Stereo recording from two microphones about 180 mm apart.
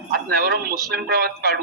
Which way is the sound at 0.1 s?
55° right (ahead or behind).